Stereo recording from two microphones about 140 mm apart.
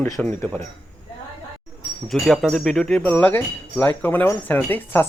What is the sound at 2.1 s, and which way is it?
Speech, centre (ahead or behind).